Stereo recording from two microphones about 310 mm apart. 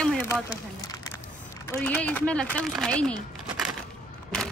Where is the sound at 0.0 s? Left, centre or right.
Centre.